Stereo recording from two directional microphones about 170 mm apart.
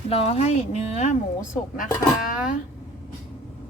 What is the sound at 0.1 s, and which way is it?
Speech, 35° left (ahead or behind).